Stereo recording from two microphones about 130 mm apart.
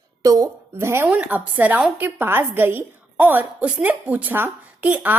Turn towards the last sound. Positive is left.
turn(degrees=-10)  # may be behind; listen again after turning